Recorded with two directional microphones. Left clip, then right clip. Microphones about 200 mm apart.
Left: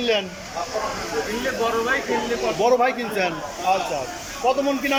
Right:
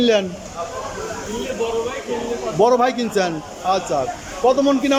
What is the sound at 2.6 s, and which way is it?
A man's voice, 20° right (ahead or behind).